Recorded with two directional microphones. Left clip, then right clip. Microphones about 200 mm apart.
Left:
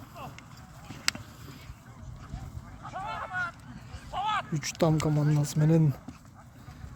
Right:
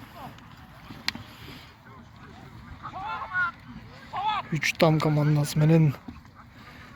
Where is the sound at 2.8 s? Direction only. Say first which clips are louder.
Right 2 dB; 65° left (ahead or behind).